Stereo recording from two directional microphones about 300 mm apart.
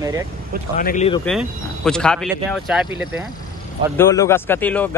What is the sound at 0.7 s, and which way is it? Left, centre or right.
Speech, left.